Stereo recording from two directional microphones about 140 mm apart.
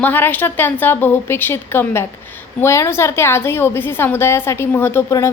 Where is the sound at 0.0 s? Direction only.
15° left (ahead or behind).